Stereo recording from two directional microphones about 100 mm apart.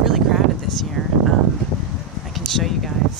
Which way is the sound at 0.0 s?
Centre (ahead or behind).